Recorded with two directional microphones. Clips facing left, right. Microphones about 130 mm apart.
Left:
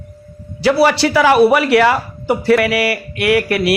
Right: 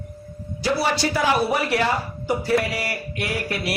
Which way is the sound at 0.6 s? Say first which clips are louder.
Left 9 dB; 75° left (ahead or behind).